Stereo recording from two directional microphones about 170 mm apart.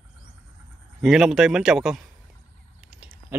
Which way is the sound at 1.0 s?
Centre (ahead or behind).